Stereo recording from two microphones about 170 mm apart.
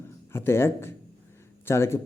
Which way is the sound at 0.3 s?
15° left (ahead or behind).